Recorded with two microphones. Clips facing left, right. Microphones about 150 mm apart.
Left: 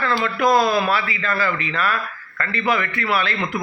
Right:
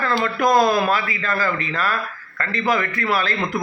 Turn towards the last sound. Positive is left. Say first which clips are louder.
# even
turn(degrees=-40)  # may be behind; listen again after turning